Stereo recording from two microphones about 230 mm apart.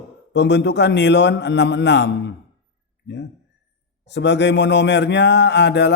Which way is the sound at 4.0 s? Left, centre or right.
Left.